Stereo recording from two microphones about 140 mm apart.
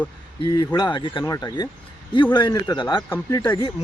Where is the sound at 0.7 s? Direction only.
35° left (ahead or behind).